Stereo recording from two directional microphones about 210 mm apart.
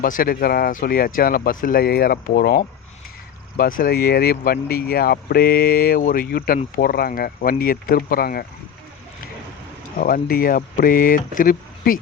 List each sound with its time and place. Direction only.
0.0 s speech: 40° left (ahead or behind)
10.0 s speech: 45° left (ahead or behind)